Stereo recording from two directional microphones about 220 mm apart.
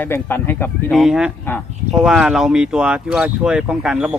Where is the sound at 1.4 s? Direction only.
10° left (ahead or behind).